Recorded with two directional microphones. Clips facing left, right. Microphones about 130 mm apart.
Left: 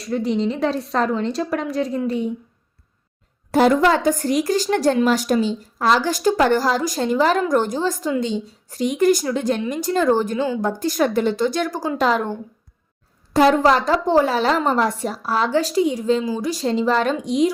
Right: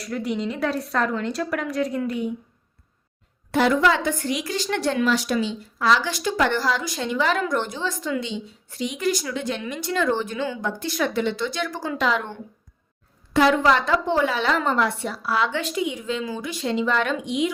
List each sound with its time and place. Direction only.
0.0 s a woman's voice: 30° left (ahead or behind)
3.5 s a woman's voice: 40° left (ahead or behind)